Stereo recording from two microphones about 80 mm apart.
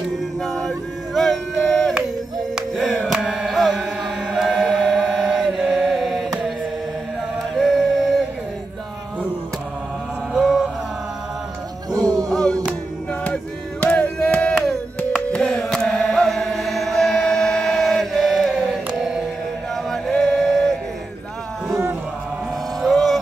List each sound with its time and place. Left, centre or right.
0.4 s vehicle: centre
2.5 s music: centre
3.0 s chant: centre
7.5 s music: centre
10.3 s music: centre
11.9 s music: right
12.3 s music: centre
13.2 s a sound: centre
15.3 s music: centre
19.7 s male singing: centre
22.8 s music: centre